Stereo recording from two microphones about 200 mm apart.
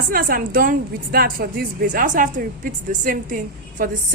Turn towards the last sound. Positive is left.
turn(degrees=-40)  # may be behind; listen again after turning